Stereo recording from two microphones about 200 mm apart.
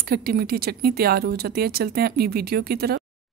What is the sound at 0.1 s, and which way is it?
A woman's voice, 50° right (ahead or behind).